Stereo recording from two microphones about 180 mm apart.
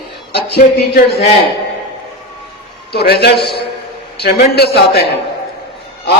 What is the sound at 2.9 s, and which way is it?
Speech, 60° left (ahead or behind).